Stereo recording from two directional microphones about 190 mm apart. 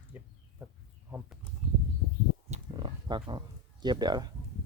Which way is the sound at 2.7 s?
25° right (ahead or behind).